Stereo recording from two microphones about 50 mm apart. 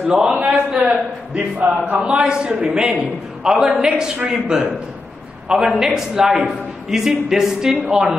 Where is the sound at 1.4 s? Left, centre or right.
Right.